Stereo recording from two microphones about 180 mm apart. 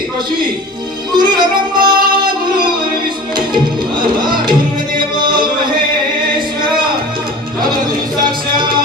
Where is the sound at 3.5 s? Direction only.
25° right (ahead or behind).